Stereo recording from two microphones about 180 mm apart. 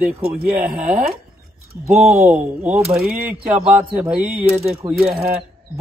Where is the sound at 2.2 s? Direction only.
10° right (ahead or behind).